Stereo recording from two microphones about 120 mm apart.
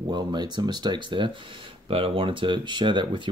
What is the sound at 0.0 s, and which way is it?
Speech, 40° right (ahead or behind).